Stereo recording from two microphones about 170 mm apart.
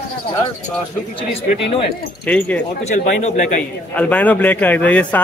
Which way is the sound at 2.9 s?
45° left (ahead or behind).